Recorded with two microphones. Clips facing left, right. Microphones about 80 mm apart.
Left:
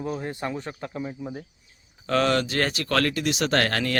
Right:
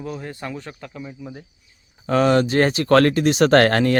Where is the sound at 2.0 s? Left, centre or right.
Centre; by 3.9 s right.